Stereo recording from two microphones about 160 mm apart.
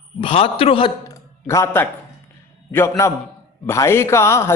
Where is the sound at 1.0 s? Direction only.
20° left (ahead or behind).